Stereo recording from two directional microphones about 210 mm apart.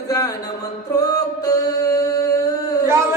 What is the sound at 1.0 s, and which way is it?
Singing, 15° left (ahead or behind).